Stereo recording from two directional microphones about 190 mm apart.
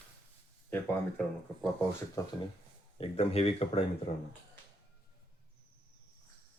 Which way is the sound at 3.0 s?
30° left (ahead or behind).